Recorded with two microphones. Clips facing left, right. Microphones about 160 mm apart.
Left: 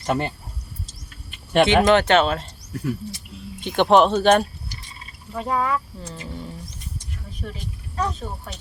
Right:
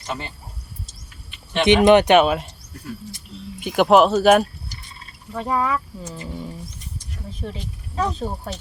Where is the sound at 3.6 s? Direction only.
5° right (ahead or behind).